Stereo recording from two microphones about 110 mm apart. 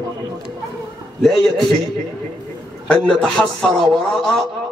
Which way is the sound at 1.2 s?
Centre (ahead or behind).